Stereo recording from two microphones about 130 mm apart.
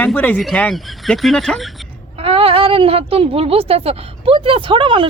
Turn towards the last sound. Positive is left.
turn(degrees=-40)  # may be behind; listen again after turning